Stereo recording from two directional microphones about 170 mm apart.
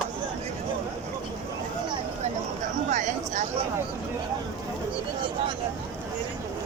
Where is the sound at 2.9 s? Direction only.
45° right (ahead or behind).